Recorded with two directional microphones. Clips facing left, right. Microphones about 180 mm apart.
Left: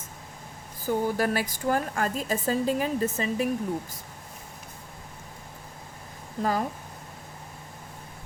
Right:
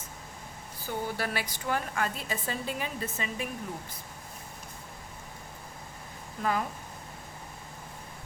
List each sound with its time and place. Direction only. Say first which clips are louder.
0.9 s a woman's voice: left 8 dB; 45° left (ahead or behind)
6.4 s speech: left 3 dB; 35° left (ahead or behind)